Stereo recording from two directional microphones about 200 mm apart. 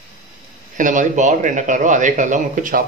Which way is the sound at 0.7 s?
40° right (ahead or behind).